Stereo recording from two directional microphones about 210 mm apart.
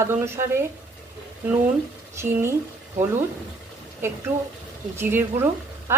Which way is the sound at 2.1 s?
10° right (ahead or behind).